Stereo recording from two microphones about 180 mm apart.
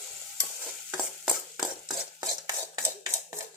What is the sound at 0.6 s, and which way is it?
Stir, 5° right (ahead or behind).